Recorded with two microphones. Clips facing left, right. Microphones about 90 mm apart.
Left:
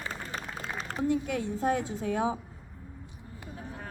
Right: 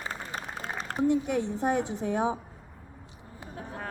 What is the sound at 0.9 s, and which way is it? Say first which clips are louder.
A woman's voice: right 4 dB; 20° right (ahead or behind).